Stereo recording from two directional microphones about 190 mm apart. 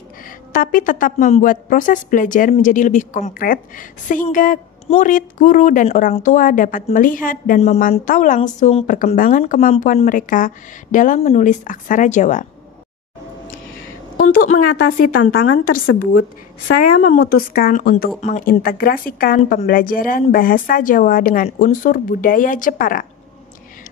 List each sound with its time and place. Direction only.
0.5 s a woman's voice: 45° left (ahead or behind)
14.1 s a woman's voice: 50° left (ahead or behind)